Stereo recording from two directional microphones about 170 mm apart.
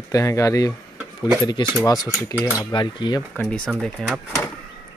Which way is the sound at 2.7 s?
30° left (ahead or behind).